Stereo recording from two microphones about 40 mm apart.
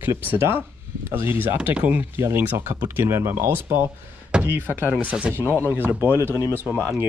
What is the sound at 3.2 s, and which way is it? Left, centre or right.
Speech, right.